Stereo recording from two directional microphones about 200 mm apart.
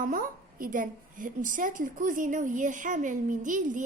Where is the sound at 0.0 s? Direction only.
45° right (ahead or behind).